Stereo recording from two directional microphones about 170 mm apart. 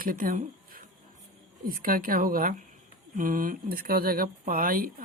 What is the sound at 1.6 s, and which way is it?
Speech, 55° right (ahead or behind).